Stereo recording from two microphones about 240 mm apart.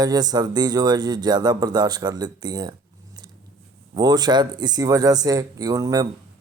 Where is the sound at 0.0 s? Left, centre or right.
Centre.